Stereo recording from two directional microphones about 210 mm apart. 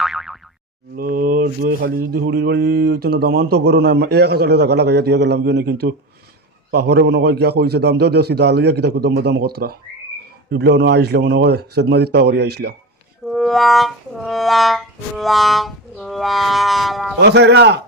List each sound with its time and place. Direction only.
0.0 s boing: centre (ahead or behind)
0.9 s speech: 45° right (ahead or behind)
13.2 s music: centre (ahead or behind)
17.2 s speech: 55° right (ahead or behind)